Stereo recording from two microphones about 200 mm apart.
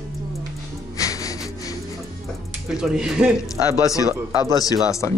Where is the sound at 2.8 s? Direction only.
5° right (ahead or behind).